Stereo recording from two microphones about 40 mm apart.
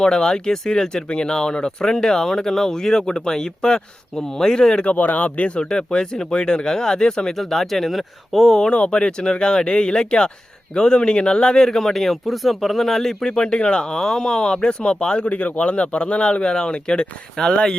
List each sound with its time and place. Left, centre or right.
0.0 s speech: centre
4.8 s a man's voice: left
5.5 s speech: centre
7.3 s speech: centre
8.7 s speech: left
15.2 s a man's voice: left
16.5 s speech: centre